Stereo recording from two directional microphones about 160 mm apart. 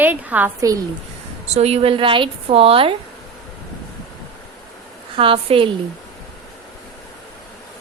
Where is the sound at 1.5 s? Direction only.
40° right (ahead or behind).